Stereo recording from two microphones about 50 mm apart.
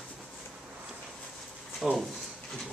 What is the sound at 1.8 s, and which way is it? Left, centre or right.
Speech, centre.